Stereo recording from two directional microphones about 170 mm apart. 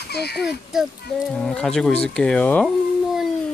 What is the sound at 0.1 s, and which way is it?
Speech, 75° left (ahead or behind).